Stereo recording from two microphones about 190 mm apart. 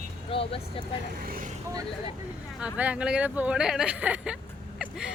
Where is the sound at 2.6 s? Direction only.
5° right (ahead or behind).